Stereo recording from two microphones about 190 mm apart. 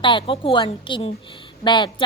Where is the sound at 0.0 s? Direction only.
25° left (ahead or behind).